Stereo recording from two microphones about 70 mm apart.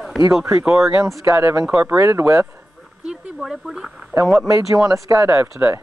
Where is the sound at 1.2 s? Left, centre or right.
Right.